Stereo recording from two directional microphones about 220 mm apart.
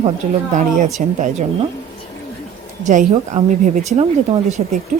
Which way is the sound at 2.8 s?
35° right (ahead or behind).